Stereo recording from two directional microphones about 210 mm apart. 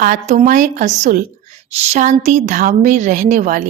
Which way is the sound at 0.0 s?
35° right (ahead or behind).